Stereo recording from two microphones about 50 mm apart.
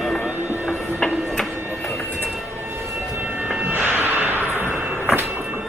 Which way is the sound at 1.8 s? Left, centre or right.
Centre.